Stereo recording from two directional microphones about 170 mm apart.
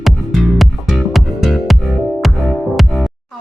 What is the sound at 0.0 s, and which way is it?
Music, centre (ahead or behind).